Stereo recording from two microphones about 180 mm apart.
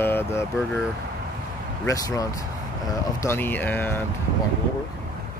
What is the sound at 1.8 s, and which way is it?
Speech, 20° left (ahead or behind).